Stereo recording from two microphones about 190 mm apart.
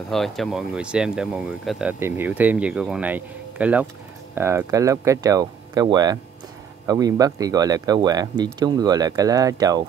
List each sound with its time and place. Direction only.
0.1 s speech: centre (ahead or behind); by 9.8 s 20° right (ahead or behind)